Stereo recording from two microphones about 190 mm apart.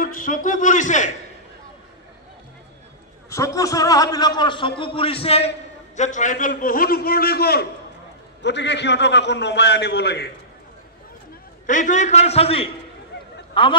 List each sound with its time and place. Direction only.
0.0 s speech: 45° left (ahead or behind)
3.3 s a man's voice: 15° left (ahead or behind); by 10.3 s 60° left (ahead or behind)
11.6 s a man's voice: 40° left (ahead or behind)